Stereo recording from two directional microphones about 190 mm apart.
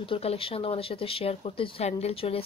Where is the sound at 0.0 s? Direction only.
30° left (ahead or behind).